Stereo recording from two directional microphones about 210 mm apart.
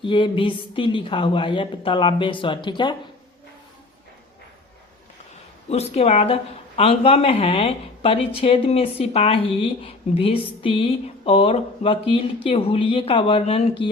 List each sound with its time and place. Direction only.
0.0 s speech: 25° left (ahead or behind)
5.6 s speech: 30° left (ahead or behind)